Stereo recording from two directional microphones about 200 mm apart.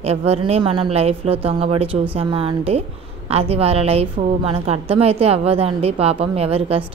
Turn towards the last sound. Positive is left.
turn(degrees=-30)  # may be behind; listen again after turning